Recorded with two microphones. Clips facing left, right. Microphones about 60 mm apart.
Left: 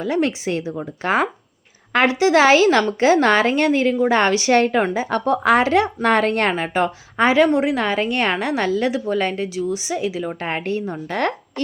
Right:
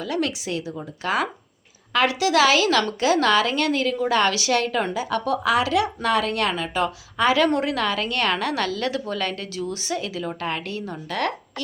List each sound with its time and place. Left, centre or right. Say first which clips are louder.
0.0 s speech: left 5 dB; left
7.4 s a woman's voice: left 4 dB; centre
10.4 s a woman's voice: left 5 dB; left